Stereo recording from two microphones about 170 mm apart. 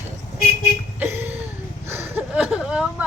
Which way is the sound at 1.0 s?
10° right (ahead or behind).